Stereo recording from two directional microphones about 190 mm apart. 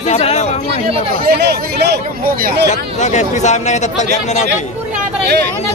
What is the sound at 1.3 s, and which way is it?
Speech, 60° right (ahead or behind).